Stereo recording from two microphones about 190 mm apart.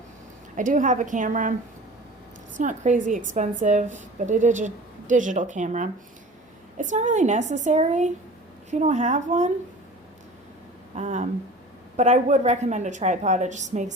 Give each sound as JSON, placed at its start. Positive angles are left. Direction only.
{"t": 0.5, "sound": "a woman's voice", "side_deg": -40}
{"t": 2.6, "sound": "a woman's voice", "side_deg": -40}
{"t": 10.9, "sound": "a woman's voice", "side_deg": -40}